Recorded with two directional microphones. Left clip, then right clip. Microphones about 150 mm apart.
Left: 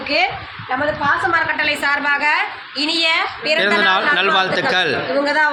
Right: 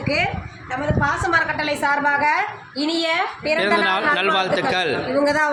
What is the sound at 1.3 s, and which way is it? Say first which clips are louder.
Speech: left 2 dB; 35° right (ahead or behind).